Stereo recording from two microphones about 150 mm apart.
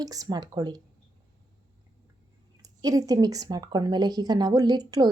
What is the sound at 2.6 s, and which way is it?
Speech, 25° right (ahead or behind).